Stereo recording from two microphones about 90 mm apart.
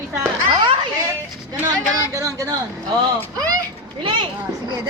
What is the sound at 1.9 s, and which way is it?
Speech, 35° right (ahead or behind).